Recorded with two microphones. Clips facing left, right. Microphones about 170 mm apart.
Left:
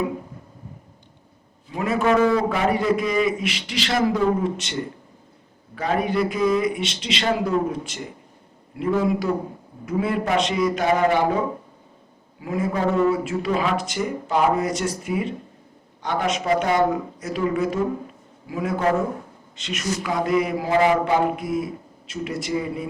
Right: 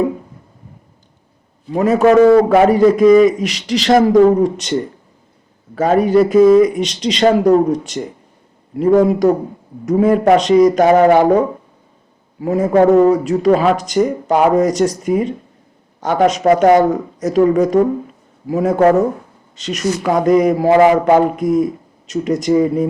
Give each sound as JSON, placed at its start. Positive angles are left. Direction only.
{"t": 1.7, "sound": "a man's voice", "side_deg": -40}
{"t": 2.6, "sound": "a man's voice", "side_deg": -40}
{"t": 16.4, "sound": "a man's voice", "side_deg": -50}